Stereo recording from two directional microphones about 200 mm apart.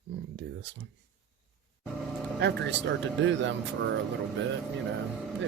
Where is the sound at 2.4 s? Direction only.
60° right (ahead or behind).